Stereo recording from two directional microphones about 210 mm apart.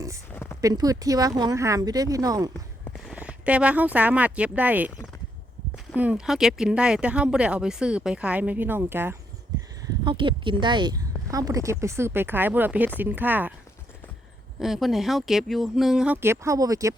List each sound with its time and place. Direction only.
0.6 s speech: 15° right (ahead or behind)
2.9 s speech: 5° right (ahead or behind)
9.5 s a sound: 15° right (ahead or behind)
10.0 s speech: 25° right (ahead or behind)
14.6 s speech: centre (ahead or behind)